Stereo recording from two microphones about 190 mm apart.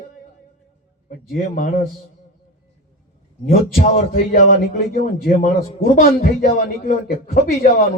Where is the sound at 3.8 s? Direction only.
50° left (ahead or behind).